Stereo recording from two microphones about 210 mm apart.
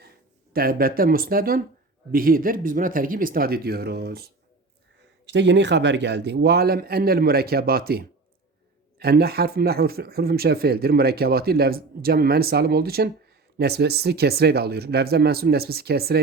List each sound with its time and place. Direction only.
0.5 s speech: 45° right (ahead or behind)